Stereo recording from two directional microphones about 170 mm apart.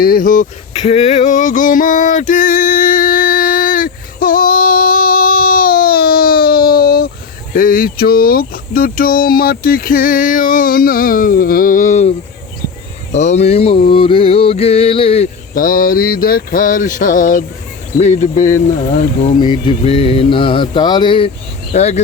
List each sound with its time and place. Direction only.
0.0 s speech: 55° left (ahead or behind)
0.7 s a sound: 35° left (ahead or behind); by 7.1 s 60° left (ahead or behind)
7.5 s speech: 55° left (ahead or behind)
13.1 s music: 40° left (ahead or behind)
15.5 s speech: 55° left (ahead or behind)
19.4 s mantra: 30° left (ahead or behind)
21.7 s music: 40° left (ahead or behind)